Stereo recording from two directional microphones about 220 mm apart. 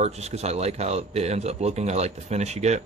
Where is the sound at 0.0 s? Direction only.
30° right (ahead or behind).